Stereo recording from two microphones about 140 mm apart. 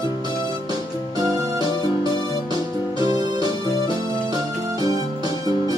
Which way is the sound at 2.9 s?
30° right (ahead or behind).